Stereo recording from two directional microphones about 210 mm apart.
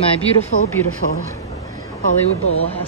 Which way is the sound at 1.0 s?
40° left (ahead or behind).